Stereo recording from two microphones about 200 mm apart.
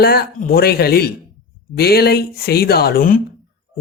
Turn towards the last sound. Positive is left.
turn(degrees=45)  # may be behind; listen again after turning